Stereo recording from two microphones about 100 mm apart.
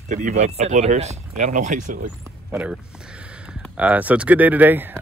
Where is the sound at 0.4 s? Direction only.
90° right.